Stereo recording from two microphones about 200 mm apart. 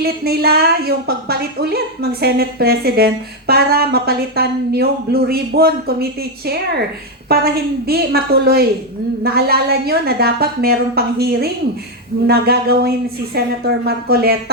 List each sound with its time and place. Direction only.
0.0 s a woman's voice: 50° right (ahead or behind)